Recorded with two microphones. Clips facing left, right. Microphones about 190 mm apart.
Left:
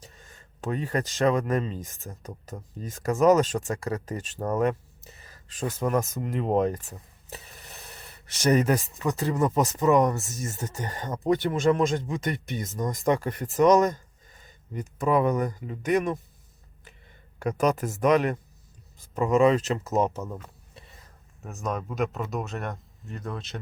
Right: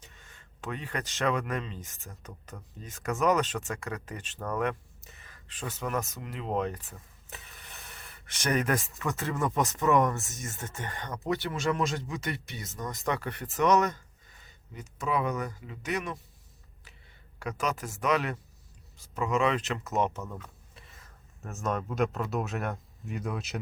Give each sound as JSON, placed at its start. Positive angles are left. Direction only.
{"t": 0.0, "sound": "speech", "side_deg": 35}
{"t": 7.3, "sound": "a sound", "side_deg": 35}
{"t": 9.0, "sound": "speech", "side_deg": 35}
{"t": 10.2, "sound": "speech", "side_deg": 0}
{"t": 10.7, "sound": "speech", "side_deg": 40}
{"t": 11.3, "sound": "speech", "side_deg": 50}
{"t": 17.4, "sound": "speech", "side_deg": 50}
{"t": 20.7, "sound": "a sound", "side_deg": 35}
{"t": 21.4, "sound": "speech", "side_deg": 0}